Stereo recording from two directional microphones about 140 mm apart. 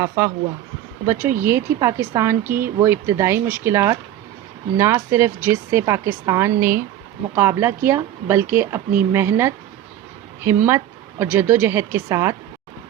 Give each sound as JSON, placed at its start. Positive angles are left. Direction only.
{"t": 0.2, "sound": "speech", "side_deg": -20}